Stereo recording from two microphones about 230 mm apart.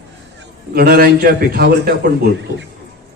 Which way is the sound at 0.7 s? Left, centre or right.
Right.